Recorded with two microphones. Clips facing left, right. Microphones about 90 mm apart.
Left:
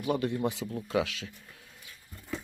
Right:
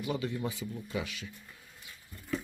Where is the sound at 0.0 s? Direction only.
55° left (ahead or behind).